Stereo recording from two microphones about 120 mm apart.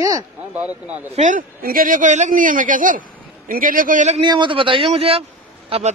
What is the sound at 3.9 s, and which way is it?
Speech, 80° right.